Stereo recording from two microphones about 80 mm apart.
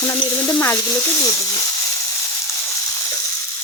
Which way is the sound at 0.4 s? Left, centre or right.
Left.